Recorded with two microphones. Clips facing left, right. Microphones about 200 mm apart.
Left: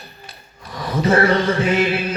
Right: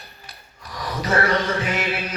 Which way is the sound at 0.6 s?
25° left (ahead or behind).